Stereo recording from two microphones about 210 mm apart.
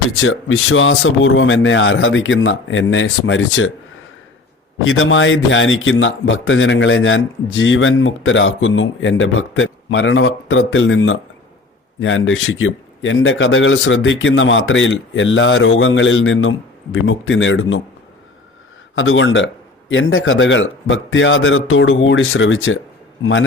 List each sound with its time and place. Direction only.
0.2 s speech: 70° left (ahead or behind)
4.9 s speech: 70° left (ahead or behind)
18.9 s speech: 65° left (ahead or behind)